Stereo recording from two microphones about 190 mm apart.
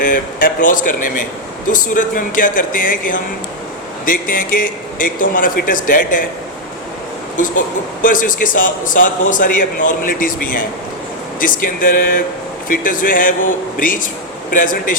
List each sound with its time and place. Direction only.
0.0 s a man's voice: 45° left (ahead or behind)
7.3 s a man's voice: 45° left (ahead or behind)